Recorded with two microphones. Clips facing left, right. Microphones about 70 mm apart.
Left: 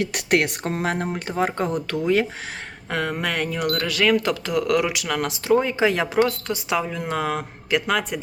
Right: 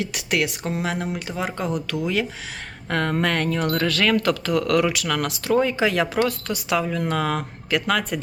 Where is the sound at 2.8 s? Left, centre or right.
Centre.